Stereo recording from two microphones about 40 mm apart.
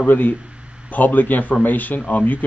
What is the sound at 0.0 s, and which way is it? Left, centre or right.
Speech, left.